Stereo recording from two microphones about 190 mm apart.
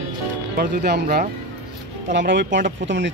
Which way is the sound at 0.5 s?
50° right (ahead or behind).